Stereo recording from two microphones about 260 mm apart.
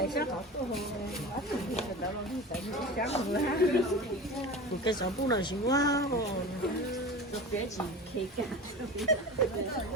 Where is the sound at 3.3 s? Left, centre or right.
Left.